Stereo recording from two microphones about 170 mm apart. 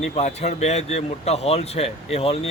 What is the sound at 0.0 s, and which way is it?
Speech, 40° left (ahead or behind).